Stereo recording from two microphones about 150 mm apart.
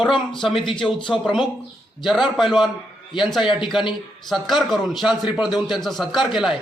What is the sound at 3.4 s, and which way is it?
Speech, 35° left (ahead or behind).